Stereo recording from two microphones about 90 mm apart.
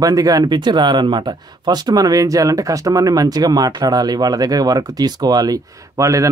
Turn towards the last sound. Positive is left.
turn(degrees=-35)  # may be behind; listen again after turning